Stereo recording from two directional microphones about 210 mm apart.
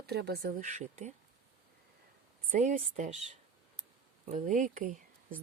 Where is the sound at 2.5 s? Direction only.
40° right (ahead or behind).